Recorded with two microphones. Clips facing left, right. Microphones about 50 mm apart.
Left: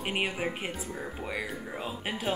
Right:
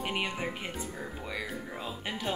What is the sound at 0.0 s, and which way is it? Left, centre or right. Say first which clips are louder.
A woman's voice: left 2 dB; centre.